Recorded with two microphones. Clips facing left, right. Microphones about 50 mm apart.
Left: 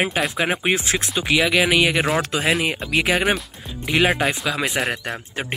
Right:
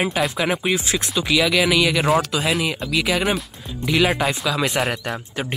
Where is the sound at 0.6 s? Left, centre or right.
Left.